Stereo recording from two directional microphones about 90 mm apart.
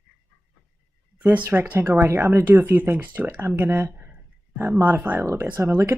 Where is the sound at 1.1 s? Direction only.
20° right (ahead or behind).